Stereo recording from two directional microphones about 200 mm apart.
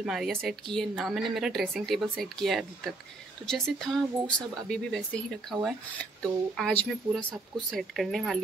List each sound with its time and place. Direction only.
0.0 s speech: centre (ahead or behind)